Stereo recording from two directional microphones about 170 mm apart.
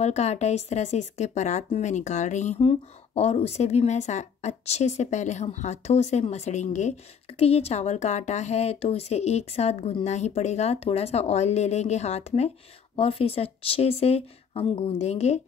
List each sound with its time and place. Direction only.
0.0 s a woman's voice: 40° left (ahead or behind)